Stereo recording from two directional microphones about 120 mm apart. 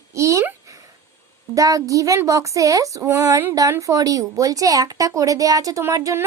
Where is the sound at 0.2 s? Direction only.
25° right (ahead or behind).